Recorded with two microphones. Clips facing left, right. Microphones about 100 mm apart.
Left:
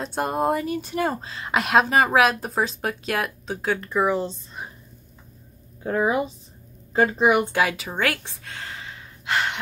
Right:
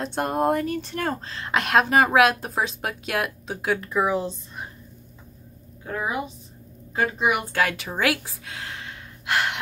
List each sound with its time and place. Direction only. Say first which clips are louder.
0.0 s speech: even; centre (ahead or behind)
5.9 s a woman's voice: left 6 dB; 30° left (ahead or behind)
7.5 s speech: left 1 dB; 5° left (ahead or behind)